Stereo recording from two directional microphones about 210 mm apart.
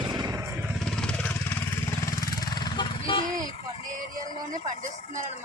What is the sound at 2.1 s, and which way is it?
Vehicle, 20° left (ahead or behind).